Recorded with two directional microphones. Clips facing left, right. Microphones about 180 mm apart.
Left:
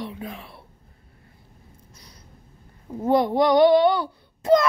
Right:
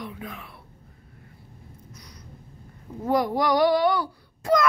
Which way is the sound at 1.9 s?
30° left (ahead or behind).